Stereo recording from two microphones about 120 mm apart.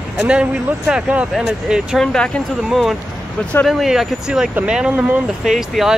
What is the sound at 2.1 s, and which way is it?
Speech, 5° left (ahead or behind).